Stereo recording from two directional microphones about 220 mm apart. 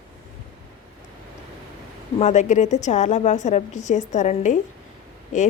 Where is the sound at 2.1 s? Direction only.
30° left (ahead or behind).